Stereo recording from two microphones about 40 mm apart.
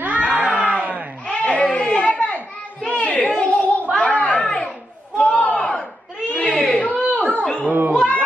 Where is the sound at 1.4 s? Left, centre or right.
Left.